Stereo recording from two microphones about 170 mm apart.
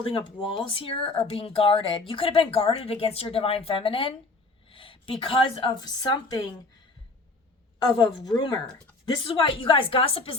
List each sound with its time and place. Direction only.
0.0 s speech: 30° left (ahead or behind)
4.7 s a sound: 30° left (ahead or behind)
5.2 s speech: 30° left (ahead or behind)
7.8 s speech: 25° left (ahead or behind)